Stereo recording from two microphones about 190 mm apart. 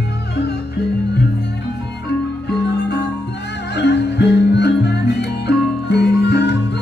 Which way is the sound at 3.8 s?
65° left (ahead or behind).